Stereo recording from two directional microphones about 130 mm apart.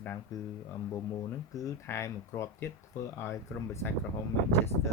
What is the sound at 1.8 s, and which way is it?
Speech, 20° left (ahead or behind).